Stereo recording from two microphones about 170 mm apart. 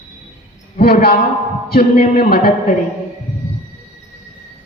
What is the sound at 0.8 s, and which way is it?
Speech, 60° left (ahead or behind).